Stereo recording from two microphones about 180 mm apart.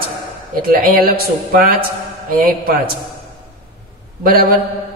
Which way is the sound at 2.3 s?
55° right (ahead or behind).